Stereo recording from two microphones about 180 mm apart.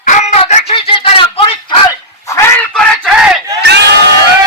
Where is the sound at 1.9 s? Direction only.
15° left (ahead or behind).